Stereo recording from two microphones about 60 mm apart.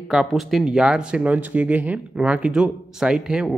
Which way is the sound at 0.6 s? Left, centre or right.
Centre.